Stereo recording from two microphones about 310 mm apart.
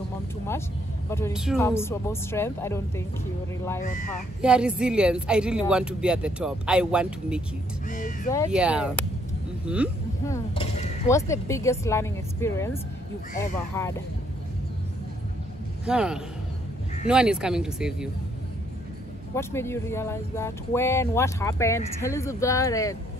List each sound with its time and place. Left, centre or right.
1.3 s speech: centre
3.8 s speech: left
4.4 s speech: centre
7.9 s speech: left
8.5 s speech: centre
10.2 s speech: centre
15.8 s a man's voice: centre
19.3 s speech: centre